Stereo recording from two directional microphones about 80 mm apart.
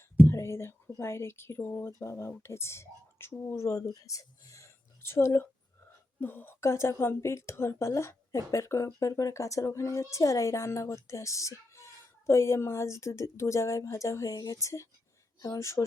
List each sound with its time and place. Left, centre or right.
0.3 s speech: left